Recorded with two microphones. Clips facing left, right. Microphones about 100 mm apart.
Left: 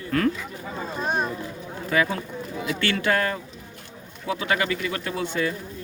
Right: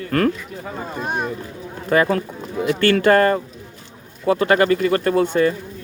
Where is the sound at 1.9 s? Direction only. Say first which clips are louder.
Right 7 dB; 50° right (ahead or behind).